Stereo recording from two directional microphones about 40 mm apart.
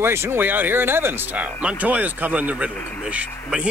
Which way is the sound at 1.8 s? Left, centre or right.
Right.